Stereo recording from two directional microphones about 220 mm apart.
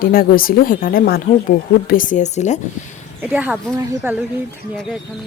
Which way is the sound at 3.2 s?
5° right (ahead or behind).